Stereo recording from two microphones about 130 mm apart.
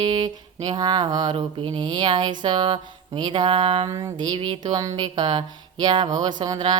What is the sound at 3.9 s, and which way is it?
Speech, 25° right (ahead or behind).